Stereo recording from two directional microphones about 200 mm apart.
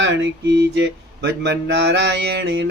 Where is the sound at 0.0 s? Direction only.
65° right (ahead or behind).